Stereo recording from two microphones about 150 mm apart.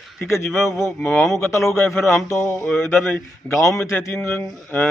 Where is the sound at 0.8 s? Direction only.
10° left (ahead or behind).